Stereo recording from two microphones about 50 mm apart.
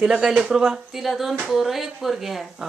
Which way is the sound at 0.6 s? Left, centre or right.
Centre.